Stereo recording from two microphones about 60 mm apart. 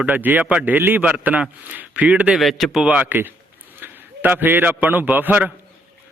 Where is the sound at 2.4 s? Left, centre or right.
Centre.